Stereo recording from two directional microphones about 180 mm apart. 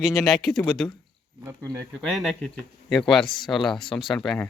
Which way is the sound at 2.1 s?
Centre (ahead or behind).